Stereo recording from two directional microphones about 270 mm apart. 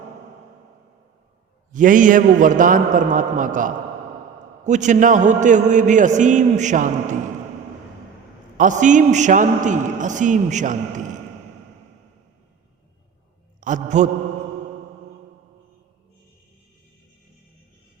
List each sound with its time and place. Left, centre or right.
1.7 s a man's voice: right
8.5 s a man's voice: right
13.6 s a man's voice: right